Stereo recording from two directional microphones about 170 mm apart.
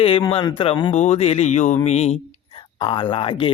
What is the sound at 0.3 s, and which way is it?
Speech, 30° left (ahead or behind).